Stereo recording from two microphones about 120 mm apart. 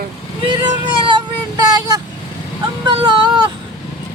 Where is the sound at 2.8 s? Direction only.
40° right (ahead or behind).